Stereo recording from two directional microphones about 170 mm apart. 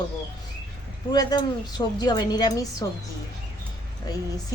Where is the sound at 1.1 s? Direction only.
25° left (ahead or behind).